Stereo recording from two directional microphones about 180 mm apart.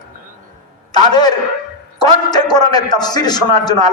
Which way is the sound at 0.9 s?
20° left (ahead or behind).